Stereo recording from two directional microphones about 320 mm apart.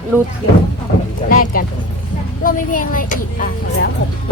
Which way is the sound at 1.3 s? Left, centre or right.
Left.